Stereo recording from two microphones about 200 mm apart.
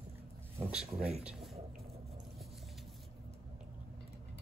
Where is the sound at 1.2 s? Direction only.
Centre (ahead or behind).